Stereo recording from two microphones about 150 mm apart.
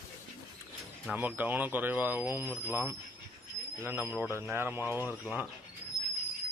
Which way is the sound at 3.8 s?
15° right (ahead or behind).